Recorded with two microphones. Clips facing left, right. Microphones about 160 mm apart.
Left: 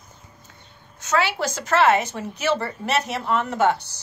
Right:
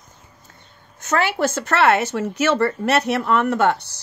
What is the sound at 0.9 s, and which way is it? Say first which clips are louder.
Speech: right 2 dB; 50° right (ahead or behind).